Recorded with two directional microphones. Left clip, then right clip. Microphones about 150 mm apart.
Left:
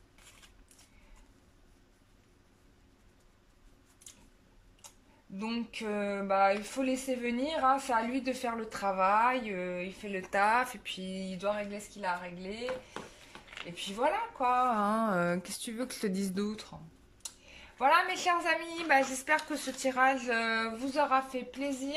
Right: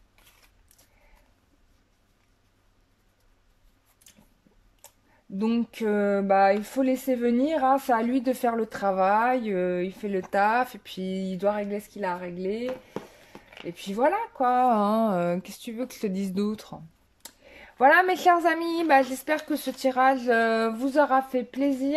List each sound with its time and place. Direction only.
5.4 s speech: 50° right (ahead or behind); by 16.4 s 20° right (ahead or behind)
16.4 s a woman's voice: 40° right (ahead or behind)
17.2 s a sound: 60° right (ahead or behind); by 18.6 s 45° right (ahead or behind)
18.9 s a woman's voice: 35° right (ahead or behind); by 21.9 s 70° right (ahead or behind)